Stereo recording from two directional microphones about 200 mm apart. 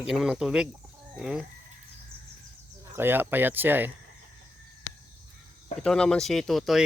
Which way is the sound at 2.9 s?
10° right (ahead or behind).